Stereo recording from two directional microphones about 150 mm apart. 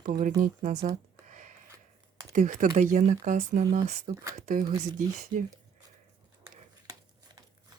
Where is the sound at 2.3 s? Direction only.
60° right (ahead or behind).